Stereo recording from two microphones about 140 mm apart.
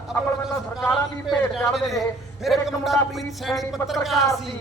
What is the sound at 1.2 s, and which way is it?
A man's voice, centre (ahead or behind).